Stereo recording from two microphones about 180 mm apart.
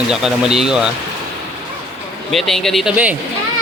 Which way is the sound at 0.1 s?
5° right (ahead or behind).